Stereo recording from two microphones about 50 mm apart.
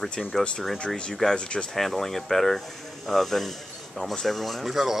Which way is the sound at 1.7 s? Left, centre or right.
Centre.